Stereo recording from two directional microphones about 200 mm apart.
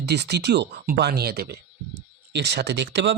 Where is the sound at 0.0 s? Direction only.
55° right (ahead or behind).